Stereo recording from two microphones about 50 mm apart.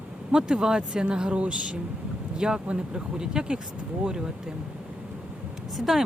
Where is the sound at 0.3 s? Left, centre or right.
Centre.